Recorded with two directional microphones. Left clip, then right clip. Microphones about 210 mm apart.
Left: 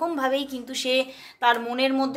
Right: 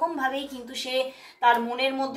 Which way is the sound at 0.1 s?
40° left (ahead or behind).